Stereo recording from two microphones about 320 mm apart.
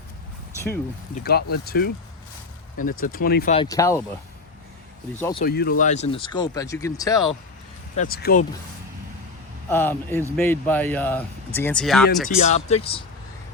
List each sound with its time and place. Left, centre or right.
1.2 s speech: left
3.0 s speech: left; by 4.0 s centre
5.4 s speech: left; by 7.2 s centre
7.9 s speech: left
9.6 s speech: centre
12.4 s speech: left